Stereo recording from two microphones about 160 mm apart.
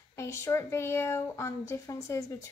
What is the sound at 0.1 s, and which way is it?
A woman's voice, 15° left (ahead or behind).